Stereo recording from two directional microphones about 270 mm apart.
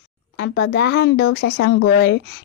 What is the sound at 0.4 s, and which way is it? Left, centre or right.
Speech, left.